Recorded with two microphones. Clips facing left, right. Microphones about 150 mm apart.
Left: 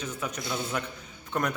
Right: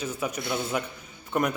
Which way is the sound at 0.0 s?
10° right (ahead or behind).